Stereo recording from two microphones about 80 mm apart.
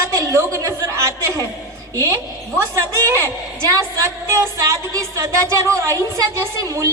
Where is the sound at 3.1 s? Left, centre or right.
Right.